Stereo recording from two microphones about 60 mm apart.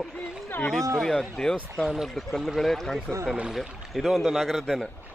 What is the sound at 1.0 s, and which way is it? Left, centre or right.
Speech, centre.